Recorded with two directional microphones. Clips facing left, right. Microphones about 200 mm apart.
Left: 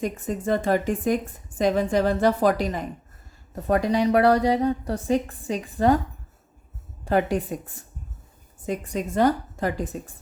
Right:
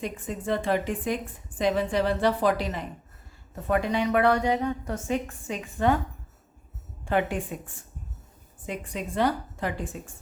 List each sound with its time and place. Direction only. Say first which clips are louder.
0.0 s a woman's voice: left 5 dB; 45° left (ahead or behind)
7.0 s a woman's voice: left 4 dB; 40° left (ahead or behind)